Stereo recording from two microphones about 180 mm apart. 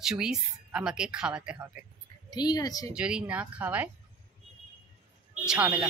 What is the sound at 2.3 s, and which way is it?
Speech, 20° left (ahead or behind).